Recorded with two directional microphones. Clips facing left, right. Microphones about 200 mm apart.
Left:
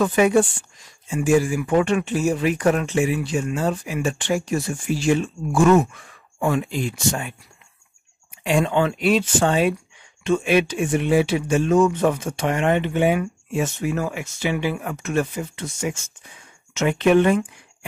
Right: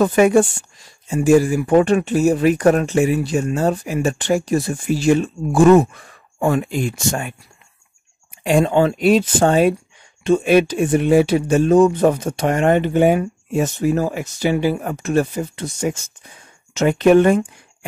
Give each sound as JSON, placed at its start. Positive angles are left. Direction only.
{"t": 0.0, "sound": "speech", "side_deg": -45}
{"t": 0.7, "sound": "speech", "side_deg": -35}
{"t": 8.5, "sound": "speech", "side_deg": -40}